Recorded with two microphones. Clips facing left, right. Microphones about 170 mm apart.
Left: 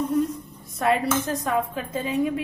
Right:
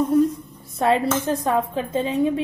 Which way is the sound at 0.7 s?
30° right (ahead or behind).